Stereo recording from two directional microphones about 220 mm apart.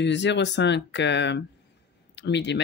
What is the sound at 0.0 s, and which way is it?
Speech, 55° left (ahead or behind).